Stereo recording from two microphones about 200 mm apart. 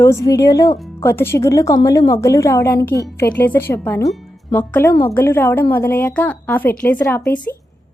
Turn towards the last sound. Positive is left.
turn(degrees=10)  # may be behind; listen again after turning